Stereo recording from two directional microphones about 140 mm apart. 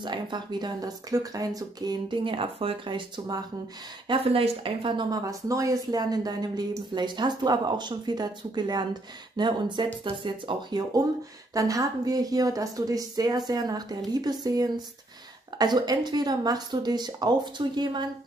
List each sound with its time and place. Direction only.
0.0 s speech: 30° right (ahead or behind)
4.1 s a woman's voice: 40° right (ahead or behind)